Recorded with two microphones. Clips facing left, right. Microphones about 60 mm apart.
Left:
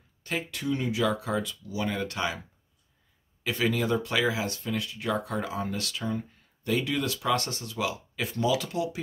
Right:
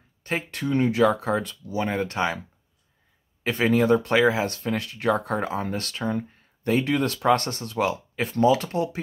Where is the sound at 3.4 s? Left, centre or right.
Right.